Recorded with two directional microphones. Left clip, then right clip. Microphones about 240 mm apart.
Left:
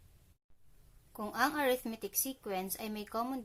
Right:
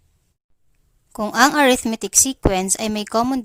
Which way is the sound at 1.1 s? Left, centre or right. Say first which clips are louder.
Right 18 dB; right.